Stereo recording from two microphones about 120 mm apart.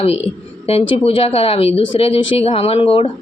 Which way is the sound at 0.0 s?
60° left (ahead or behind).